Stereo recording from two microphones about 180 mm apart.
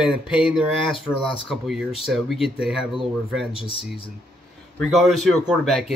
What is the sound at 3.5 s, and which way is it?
Speech, 30° left (ahead or behind).